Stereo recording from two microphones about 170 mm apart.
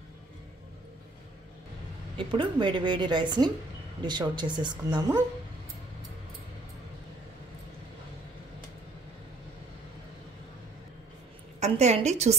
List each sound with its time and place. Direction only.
2.1 s a woman's voice: 30° right (ahead or behind)
11.6 s a woman's voice: 40° right (ahead or behind)